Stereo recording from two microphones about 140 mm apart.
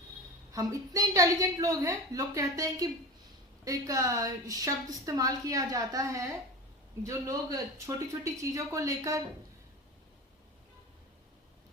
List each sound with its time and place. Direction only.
0.5 s a woman's voice: 25° right (ahead or behind)